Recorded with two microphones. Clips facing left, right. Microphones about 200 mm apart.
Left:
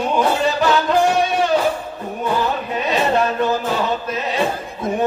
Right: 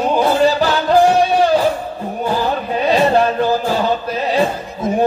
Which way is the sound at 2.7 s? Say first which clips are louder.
Right 5 dB; 35° right (ahead or behind).